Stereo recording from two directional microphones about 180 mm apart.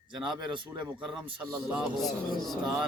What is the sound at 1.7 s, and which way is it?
Speech, centre (ahead or behind).